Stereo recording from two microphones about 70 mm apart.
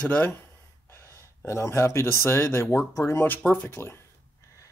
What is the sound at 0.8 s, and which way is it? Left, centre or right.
Speech, left.